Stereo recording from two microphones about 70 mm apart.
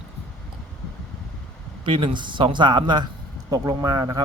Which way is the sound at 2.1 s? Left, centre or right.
Right.